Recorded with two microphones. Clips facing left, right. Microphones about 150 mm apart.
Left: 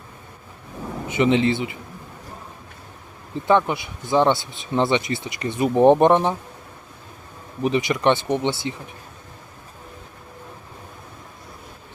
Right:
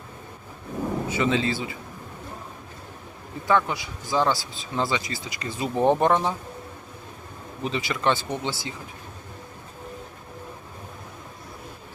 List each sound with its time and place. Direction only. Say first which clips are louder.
1.0 s speech: left 7 dB; 20° left (ahead or behind)
3.4 s speech: left 4 dB; 20° left (ahead or behind)
7.6 s speech: left 6 dB; 20° left (ahead or behind)